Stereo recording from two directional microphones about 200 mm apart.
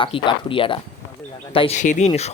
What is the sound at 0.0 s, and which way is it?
Speech, 25° left (ahead or behind).